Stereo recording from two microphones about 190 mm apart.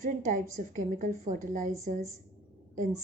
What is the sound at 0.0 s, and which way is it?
A woman's voice, 45° right (ahead or behind).